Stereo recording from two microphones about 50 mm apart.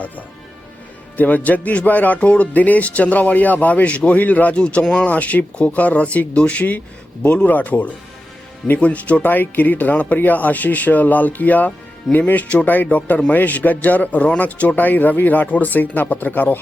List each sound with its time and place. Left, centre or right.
1.1 s speech: left
9.2 s speech: left